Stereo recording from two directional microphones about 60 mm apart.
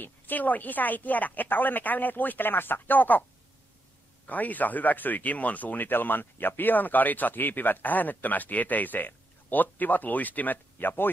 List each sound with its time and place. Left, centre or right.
0.0 s speech: left
4.3 s speech: left